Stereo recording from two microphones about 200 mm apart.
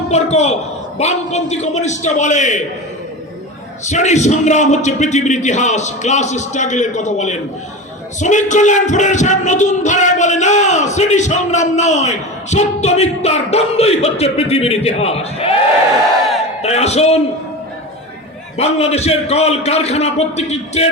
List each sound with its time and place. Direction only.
0.1 s child singing: 35° left (ahead or behind)
3.8 s child singing: 35° left (ahead or behind)
16.6 s a man's voice: 30° left (ahead or behind)
18.5 s child singing: 30° left (ahead or behind)